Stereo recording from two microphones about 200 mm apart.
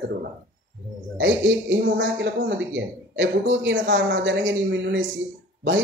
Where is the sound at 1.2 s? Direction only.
65° right (ahead or behind).